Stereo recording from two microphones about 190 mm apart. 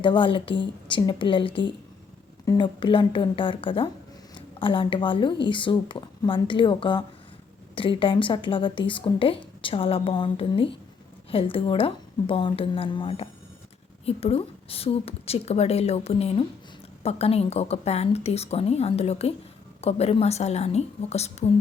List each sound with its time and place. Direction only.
0.0 s a woman's voice: 25° left (ahead or behind)